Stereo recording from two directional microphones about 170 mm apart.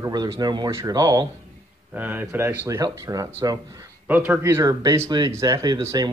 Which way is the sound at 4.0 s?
10° right (ahead or behind).